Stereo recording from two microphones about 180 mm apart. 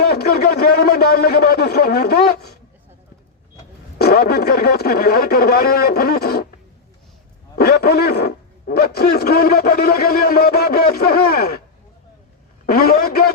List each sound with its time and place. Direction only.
0.0 s speech: 60° left (ahead or behind)
3.9 s speech: 60° left (ahead or behind)
7.5 s speech: 60° left (ahead or behind)
12.6 s speech: 55° left (ahead or behind)